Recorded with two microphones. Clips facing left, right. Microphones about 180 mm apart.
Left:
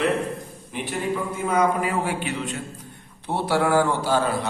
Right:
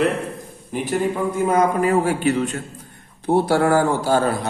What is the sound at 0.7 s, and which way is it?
A man's voice, 40° right (ahead or behind).